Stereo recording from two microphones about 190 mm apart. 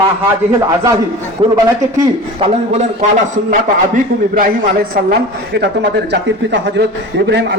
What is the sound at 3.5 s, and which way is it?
A man's voice, 45° right (ahead or behind).